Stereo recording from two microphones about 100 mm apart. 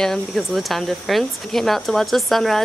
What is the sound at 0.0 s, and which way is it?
Speech, centre (ahead or behind).